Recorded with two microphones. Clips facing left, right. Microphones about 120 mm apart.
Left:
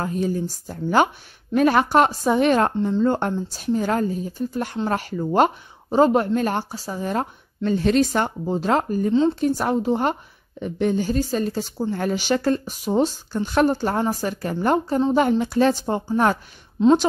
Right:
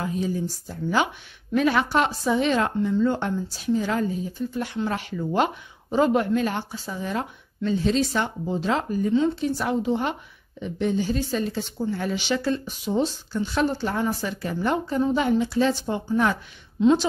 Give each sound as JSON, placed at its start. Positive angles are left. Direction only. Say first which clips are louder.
{"t": 0.0, "sound": "a woman's voice", "louder": "left 3 dB", "side_deg": 45}
{"t": 9.1, "sound": "speech", "louder": "left 3 dB", "side_deg": 30}
{"t": 9.4, "sound": "a woman's voice", "louder": "left 4 dB", "side_deg": 45}